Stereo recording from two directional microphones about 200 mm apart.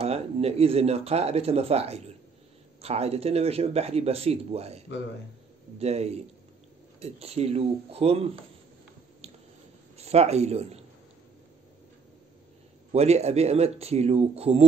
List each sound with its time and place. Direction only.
0.0 s speech: 30° right (ahead or behind)
9.2 s squish: 30° right (ahead or behind)
9.9 s a man's voice: 30° right (ahead or behind)
12.9 s speech: 30° right (ahead or behind)